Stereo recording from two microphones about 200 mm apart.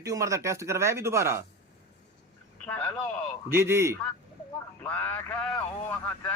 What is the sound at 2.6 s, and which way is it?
Speech, 10° left (ahead or behind).